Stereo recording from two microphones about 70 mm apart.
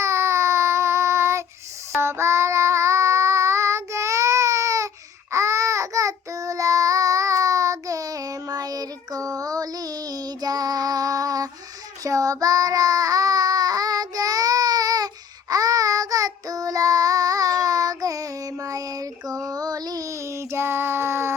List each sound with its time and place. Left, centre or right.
0.0 s child singing: right
20.2 s child singing: right